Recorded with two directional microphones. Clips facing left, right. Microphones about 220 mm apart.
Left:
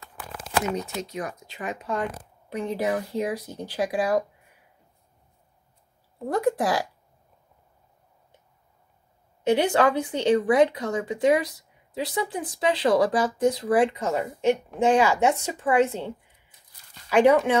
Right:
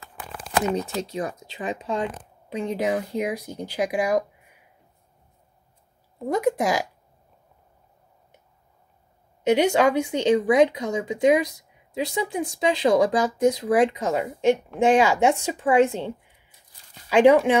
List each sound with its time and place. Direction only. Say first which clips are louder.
0.7 s speech: right 4 dB; 30° right (ahead or behind); by 4.2 s 15° right (ahead or behind)
6.2 s speech: right 1 dB; 10° right (ahead or behind)
9.5 s speech: right 2 dB; 15° right (ahead or behind)
17.1 s speech: right 2 dB; 15° right (ahead or behind)